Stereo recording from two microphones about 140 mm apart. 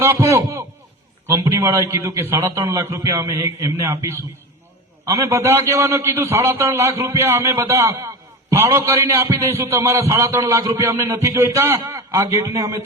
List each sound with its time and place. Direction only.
0.0 s a man's voice: 20° right (ahead or behind)